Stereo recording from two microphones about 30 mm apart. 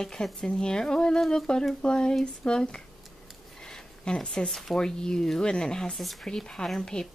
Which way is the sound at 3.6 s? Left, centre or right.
Left.